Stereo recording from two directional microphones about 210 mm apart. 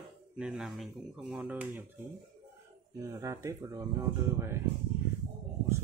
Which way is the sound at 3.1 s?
15° right (ahead or behind).